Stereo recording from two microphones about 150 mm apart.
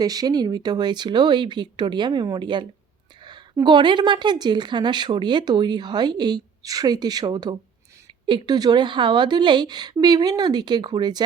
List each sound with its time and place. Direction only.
0.0 s a woman's voice: 25° right (ahead or behind)